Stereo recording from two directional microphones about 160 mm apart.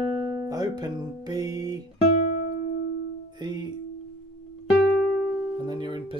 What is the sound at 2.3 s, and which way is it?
Music, 55° left (ahead or behind).